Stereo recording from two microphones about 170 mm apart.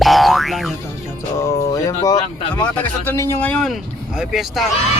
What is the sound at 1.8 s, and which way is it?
Speech, 20° left (ahead or behind).